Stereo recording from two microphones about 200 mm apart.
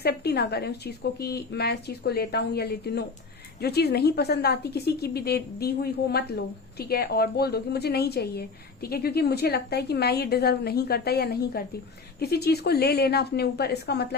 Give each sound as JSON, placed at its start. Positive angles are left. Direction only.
{"t": 0.0, "sound": "a woman's voice", "side_deg": 50}